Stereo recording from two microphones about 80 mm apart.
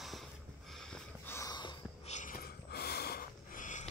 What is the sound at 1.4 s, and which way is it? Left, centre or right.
Snort, left.